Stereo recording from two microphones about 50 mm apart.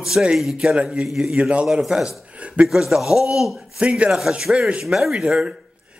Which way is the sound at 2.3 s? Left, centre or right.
Right.